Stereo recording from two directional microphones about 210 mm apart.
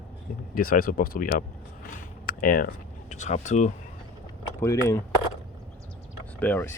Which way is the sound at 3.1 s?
35° left (ahead or behind).